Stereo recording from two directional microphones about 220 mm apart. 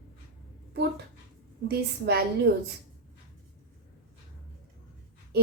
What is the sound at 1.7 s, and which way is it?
Speech, 45° right (ahead or behind).